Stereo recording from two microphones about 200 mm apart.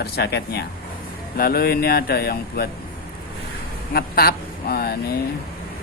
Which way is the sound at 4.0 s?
50° left (ahead or behind).